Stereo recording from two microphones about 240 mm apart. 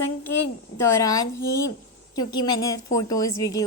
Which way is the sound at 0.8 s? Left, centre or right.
Centre.